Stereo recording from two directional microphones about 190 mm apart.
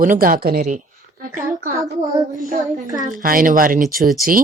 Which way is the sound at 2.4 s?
40° right (ahead or behind).